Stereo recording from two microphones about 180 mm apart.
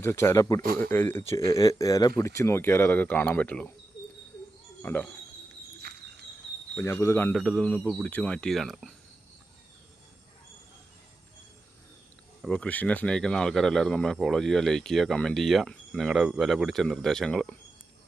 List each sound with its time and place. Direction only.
0.0 s speech: 15° left (ahead or behind)
4.8 s speech: 10° left (ahead or behind)
5.9 s cricket: 65° right (ahead or behind)
6.7 s speech: 15° left (ahead or behind)
12.4 s speech: 5° left (ahead or behind)